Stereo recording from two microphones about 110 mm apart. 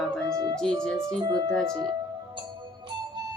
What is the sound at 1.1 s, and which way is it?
Speech, 40° right (ahead or behind).